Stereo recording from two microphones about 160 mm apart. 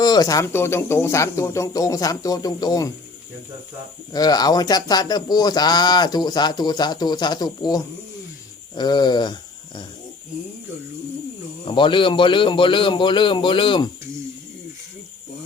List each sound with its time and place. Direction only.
0.0 s speech: 25° left (ahead or behind)
4.1 s speech: 25° left (ahead or behind)
11.7 s a man's voice: 30° left (ahead or behind)